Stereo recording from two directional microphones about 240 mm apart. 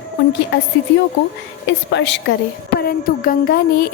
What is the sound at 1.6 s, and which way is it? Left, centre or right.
Speech, left.